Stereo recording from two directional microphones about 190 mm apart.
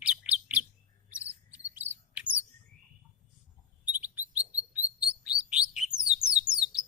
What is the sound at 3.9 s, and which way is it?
Chirp, 10° right (ahead or behind).